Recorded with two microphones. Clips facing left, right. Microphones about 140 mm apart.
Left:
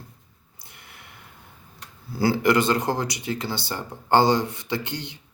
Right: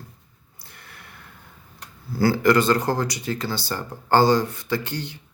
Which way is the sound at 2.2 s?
20° left (ahead or behind).